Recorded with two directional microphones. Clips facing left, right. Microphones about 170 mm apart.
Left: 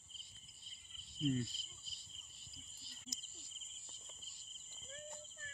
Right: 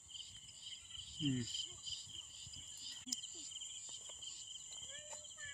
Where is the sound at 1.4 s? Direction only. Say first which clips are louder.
Left 2 dB; 65° right (ahead or behind).